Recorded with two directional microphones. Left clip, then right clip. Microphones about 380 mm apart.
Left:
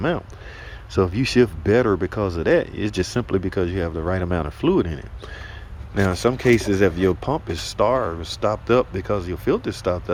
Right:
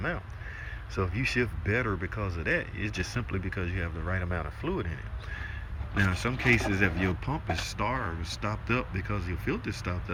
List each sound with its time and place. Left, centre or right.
1.1 s speech: centre